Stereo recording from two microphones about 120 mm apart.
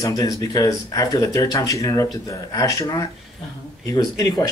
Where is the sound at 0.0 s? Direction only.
30° left (ahead or behind).